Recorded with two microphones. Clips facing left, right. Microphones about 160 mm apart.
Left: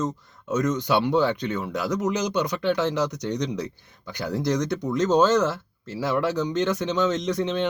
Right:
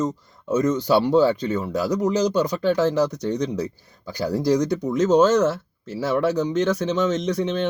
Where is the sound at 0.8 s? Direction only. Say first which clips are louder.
Right 5 dB; 35° right (ahead or behind).